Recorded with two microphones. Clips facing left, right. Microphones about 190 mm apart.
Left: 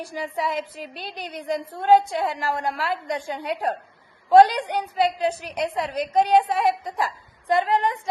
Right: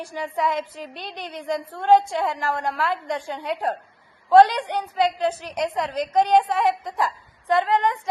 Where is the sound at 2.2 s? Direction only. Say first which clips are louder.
Even; 35° left (ahead or behind).